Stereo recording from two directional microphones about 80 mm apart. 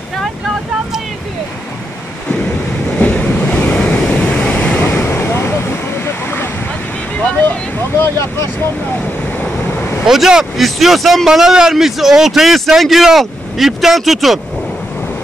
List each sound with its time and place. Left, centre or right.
3.0 s waves: centre
4.8 s vehicle: left
8.0 s speech: left
10.0 s speech: centre